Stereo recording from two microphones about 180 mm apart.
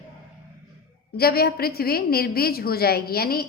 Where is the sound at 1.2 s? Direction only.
60° left (ahead or behind).